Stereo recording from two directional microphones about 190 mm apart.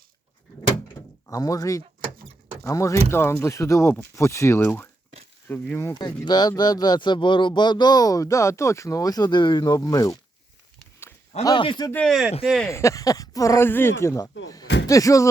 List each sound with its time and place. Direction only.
1.0 s door: 15° left (ahead or behind)
1.3 s speech: 15° left (ahead or behind)
11.4 s speech: 25° left (ahead or behind)
11.9 s speech: 5° left (ahead or behind)
12.7 s speech: 15° left (ahead or behind)